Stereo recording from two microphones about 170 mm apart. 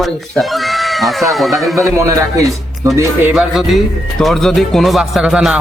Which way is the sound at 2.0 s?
15° right (ahead or behind).